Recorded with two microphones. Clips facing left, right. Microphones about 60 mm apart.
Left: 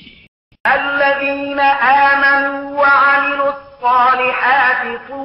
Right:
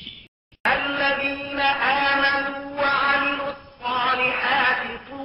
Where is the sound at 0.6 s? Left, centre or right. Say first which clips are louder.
Left 8 dB; left.